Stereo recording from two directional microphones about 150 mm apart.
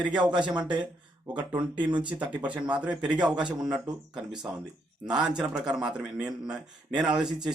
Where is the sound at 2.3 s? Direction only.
10° right (ahead or behind).